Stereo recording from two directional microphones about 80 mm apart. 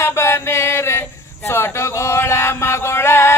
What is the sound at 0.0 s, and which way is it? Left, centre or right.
Music, left.